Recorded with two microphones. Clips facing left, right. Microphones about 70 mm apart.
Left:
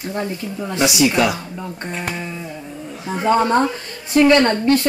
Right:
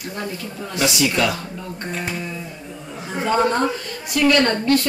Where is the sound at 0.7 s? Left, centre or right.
Left.